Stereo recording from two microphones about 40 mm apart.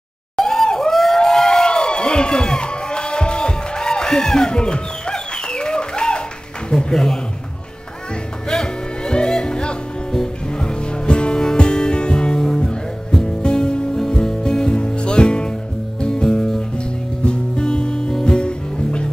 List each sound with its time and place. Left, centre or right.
0.4 s crowd: centre
6.7 s speech: centre
8.5 s music: centre
13.9 s music: centre
16.7 s music: left